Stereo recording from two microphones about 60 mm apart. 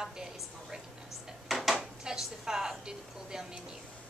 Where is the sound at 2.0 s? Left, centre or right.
Centre.